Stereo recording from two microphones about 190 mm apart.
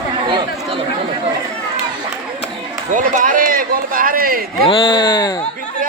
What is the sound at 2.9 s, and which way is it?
Speech, 45° right (ahead or behind).